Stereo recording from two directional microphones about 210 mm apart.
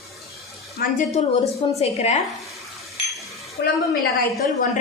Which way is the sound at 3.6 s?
50° left (ahead or behind).